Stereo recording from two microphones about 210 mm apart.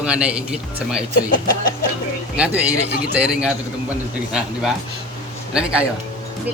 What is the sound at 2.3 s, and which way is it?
Speech, 5° right (ahead or behind).